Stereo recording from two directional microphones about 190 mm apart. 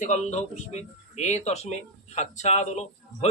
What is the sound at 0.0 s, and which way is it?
A man's voice, 40° left (ahead or behind).